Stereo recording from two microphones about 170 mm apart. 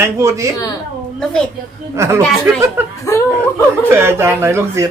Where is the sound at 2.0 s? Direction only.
15° right (ahead or behind).